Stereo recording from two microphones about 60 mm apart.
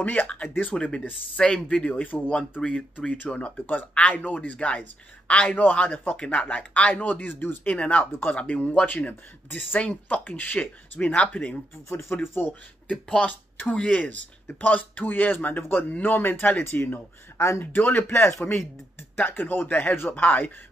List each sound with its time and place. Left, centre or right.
0.0 s speech: left
7.7 s speech: centre
8.0 s speech: left
8.3 s speech: left
11.1 s speech: centre
11.9 s speech: left
12.9 s speech: centre
13.3 s speech: left
17.4 s speech: left
17.7 s speech: left